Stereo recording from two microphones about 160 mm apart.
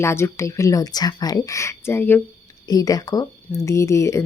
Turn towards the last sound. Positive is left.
turn(degrees=20)  # may be behind; listen again after turning